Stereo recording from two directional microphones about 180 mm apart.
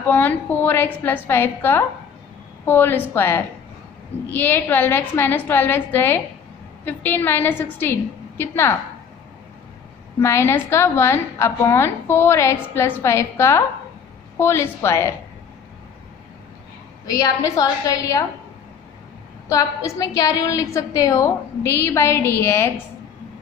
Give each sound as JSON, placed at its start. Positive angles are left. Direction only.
{"t": 0.0, "sound": "a woman's voice", "side_deg": 10}
{"t": 10.2, "sound": "a woman's voice", "side_deg": 15}
{"t": 17.2, "sound": "a woman's voice", "side_deg": 20}
{"t": 19.5, "sound": "a woman's voice", "side_deg": 20}